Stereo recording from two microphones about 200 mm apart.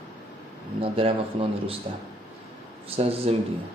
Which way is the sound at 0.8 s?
25° right (ahead or behind).